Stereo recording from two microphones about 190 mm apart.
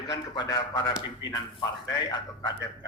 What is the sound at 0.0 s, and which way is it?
A man's voice, 20° left (ahead or behind).